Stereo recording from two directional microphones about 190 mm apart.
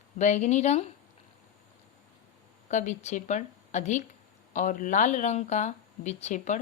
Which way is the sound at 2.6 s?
40° left (ahead or behind).